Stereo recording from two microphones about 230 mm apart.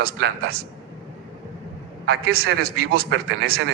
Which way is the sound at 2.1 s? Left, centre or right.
Right.